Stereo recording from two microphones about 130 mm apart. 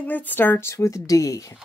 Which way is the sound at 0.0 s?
15° left (ahead or behind).